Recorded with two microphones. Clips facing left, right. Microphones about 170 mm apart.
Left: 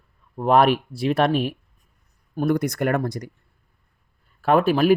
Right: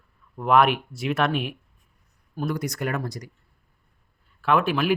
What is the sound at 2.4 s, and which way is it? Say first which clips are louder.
Speech: left 6 dB; 55° left (ahead or behind).